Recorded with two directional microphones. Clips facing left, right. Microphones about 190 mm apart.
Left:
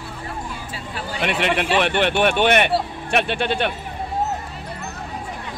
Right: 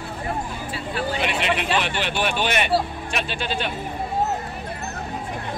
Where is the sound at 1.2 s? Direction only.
55° left (ahead or behind).